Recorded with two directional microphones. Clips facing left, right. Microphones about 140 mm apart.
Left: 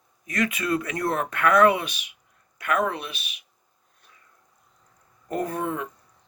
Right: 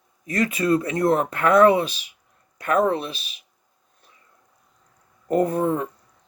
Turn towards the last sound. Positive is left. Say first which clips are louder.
# right 7 dB
turn(degrees=-35)  # may be behind; listen again after turning